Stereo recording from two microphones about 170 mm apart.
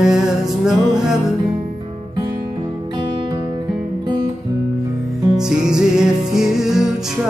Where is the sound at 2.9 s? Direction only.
30° right (ahead or behind).